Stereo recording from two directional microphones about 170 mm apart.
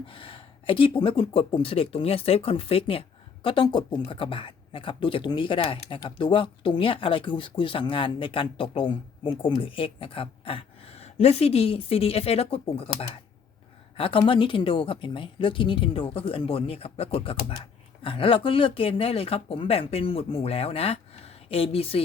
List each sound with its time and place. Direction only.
0.0 s speech: 30° left (ahead or behind)
13.9 s speech: 35° left (ahead or behind)